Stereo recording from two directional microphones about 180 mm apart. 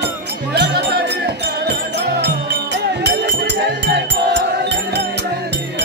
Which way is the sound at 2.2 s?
70° right (ahead or behind).